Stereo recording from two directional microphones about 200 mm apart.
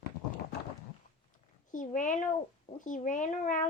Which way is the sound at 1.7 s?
40° left (ahead or behind).